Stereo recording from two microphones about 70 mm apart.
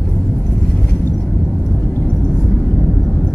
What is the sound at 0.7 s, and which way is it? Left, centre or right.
Vehicle, left.